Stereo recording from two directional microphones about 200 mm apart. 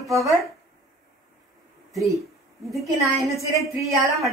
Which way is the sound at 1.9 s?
Centre (ahead or behind).